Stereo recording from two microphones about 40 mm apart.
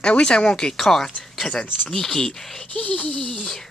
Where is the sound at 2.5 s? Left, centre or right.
Left.